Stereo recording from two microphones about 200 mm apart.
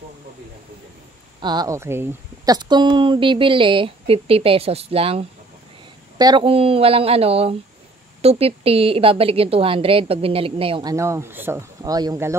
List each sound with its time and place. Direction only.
1.4 s a woman's voice: 20° right (ahead or behind)